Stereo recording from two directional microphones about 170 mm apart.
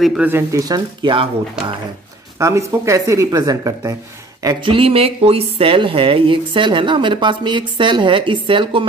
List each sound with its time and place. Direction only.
0.0 s speech: centre (ahead or behind)
0.3 s speech: 15° right (ahead or behind)
2.3 s speech: 15° right (ahead or behind)